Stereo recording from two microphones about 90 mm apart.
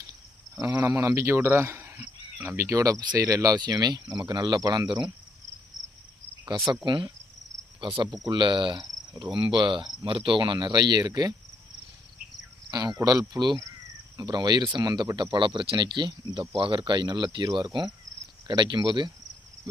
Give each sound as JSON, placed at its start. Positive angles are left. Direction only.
{"t": 0.9, "sound": "speech", "side_deg": -35}
{"t": 6.4, "sound": "cricket", "side_deg": -55}
{"t": 6.8, "sound": "speech", "side_deg": -60}
{"t": 7.8, "sound": "cricket", "side_deg": -65}
{"t": 8.2, "sound": "speech", "side_deg": -60}
{"t": 10.0, "sound": "speech", "side_deg": -80}
{"t": 12.7, "sound": "speech", "side_deg": -50}
{"t": 16.6, "sound": "speech", "side_deg": -70}